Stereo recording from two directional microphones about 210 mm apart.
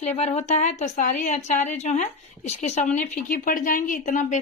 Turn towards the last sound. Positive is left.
turn(degrees=40)  # may be behind; listen again after turning